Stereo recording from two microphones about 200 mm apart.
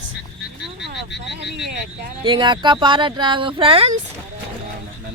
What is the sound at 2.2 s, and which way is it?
Speech, 20° right (ahead or behind).